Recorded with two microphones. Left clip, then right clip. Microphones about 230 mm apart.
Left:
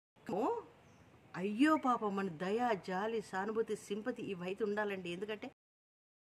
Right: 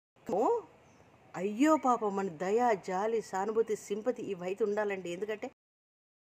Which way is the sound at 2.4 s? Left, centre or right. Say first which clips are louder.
Right 8 dB; centre.